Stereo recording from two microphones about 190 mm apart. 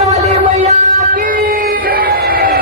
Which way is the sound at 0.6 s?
40° right (ahead or behind).